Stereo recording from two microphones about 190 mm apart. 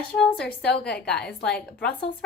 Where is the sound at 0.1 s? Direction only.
5° left (ahead or behind).